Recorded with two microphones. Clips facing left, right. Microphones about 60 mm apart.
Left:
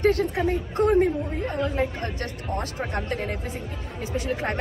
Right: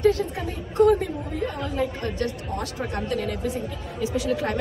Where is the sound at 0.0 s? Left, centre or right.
Left.